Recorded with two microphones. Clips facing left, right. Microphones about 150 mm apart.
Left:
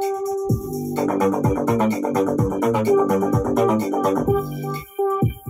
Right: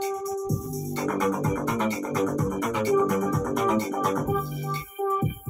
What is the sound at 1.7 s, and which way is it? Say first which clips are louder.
Music: left 7 dB; 55° left (ahead or behind).